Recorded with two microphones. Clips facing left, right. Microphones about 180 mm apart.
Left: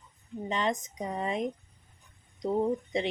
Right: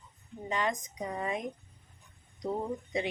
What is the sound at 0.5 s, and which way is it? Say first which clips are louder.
Speech: left 2 dB; 25° left (ahead or behind).